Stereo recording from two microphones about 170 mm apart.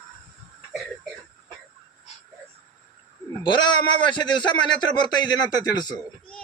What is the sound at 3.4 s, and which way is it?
A man's voice, 25° left (ahead or behind).